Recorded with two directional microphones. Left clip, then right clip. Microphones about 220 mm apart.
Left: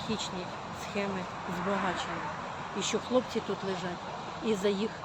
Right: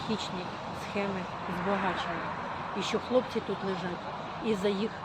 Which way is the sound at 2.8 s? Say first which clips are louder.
Right 1 dB; 20° left (ahead or behind).